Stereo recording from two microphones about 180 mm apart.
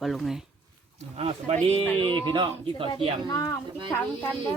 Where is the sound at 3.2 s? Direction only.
20° left (ahead or behind).